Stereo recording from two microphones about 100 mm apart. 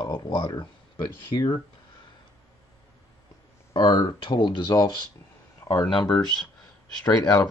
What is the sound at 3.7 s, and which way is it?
Speech, 55° left (ahead or behind).